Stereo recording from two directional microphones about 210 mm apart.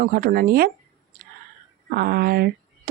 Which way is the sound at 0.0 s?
40° right (ahead or behind).